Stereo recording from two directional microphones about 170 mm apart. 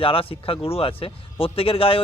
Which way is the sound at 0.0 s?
30° left (ahead or behind).